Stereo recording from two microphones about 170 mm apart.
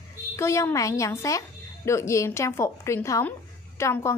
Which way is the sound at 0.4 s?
15° left (ahead or behind).